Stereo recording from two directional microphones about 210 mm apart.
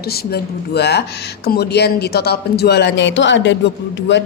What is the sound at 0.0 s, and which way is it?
Speech, 50° left (ahead or behind).